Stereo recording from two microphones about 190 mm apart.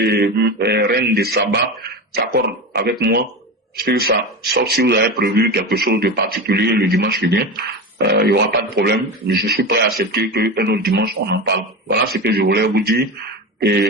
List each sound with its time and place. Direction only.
0.0 s speech: 55° right (ahead or behind)